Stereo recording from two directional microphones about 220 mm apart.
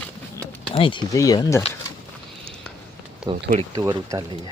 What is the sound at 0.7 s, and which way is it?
Speech, 25° left (ahead or behind).